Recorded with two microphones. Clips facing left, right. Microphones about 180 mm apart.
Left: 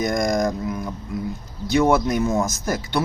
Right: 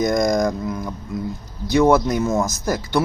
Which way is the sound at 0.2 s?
5° left (ahead or behind).